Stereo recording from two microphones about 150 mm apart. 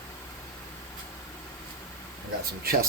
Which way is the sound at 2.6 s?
80° right.